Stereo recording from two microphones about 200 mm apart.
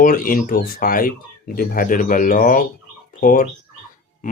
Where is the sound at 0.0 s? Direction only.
45° left (ahead or behind).